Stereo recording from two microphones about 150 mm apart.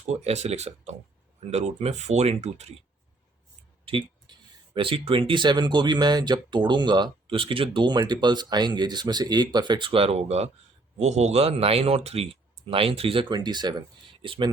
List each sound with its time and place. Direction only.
0.0 s speech: 45° right (ahead or behind)
3.8 s speech: 35° right (ahead or behind)